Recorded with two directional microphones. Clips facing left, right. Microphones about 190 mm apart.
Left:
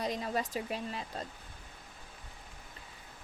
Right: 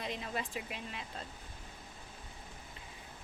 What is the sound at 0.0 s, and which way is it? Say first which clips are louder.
A woman's voice: left 5 dB; 40° left (ahead or behind).